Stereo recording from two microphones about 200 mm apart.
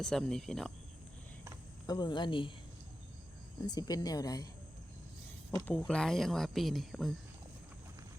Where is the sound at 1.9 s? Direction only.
20° left (ahead or behind).